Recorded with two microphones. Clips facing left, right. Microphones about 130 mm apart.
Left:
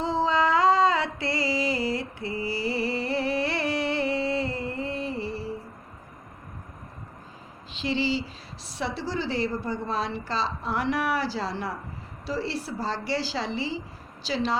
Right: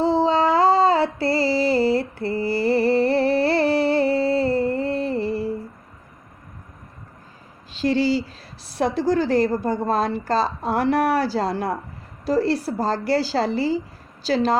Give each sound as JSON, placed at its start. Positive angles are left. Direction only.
{"t": 0.0, "sound": "music", "side_deg": -30}
{"t": 7.8, "sound": "a woman's voice", "side_deg": -45}